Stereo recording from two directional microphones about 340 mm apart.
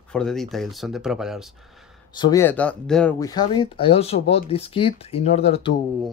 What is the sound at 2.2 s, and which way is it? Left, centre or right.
Speech, centre.